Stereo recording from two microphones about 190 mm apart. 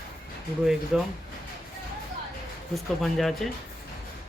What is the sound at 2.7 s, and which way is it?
Speech, centre (ahead or behind).